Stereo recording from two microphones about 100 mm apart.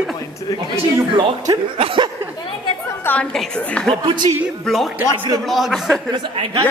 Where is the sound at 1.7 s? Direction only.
60° right (ahead or behind).